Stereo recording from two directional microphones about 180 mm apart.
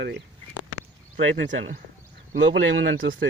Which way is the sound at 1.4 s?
45° right (ahead or behind).